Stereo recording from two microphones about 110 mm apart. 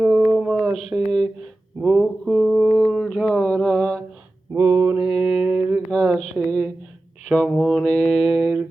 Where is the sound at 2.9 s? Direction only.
5° left (ahead or behind).